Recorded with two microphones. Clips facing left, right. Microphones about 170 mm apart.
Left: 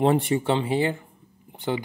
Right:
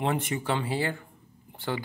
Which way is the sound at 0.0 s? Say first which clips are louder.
Left 8 dB; 35° left (ahead or behind).